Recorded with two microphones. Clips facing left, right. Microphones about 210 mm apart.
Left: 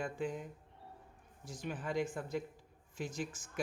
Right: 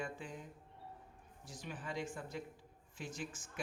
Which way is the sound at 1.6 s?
50° left (ahead or behind).